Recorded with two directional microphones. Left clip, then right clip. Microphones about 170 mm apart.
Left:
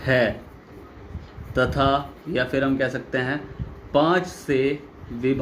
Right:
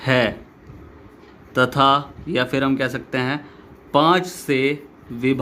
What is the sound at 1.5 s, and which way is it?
Speech, 55° right (ahead or behind).